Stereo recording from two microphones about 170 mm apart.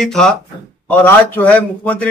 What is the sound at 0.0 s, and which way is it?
A man's voice, 5° left (ahead or behind).